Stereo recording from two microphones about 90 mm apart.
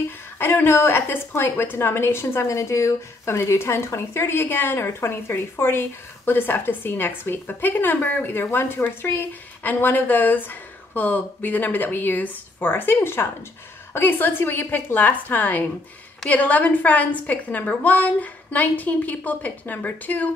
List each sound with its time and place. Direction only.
0.4 s a woman's voice: 25° left (ahead or behind)